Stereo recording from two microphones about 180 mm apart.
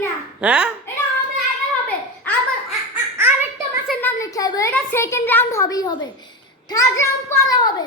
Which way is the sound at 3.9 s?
10° left (ahead or behind).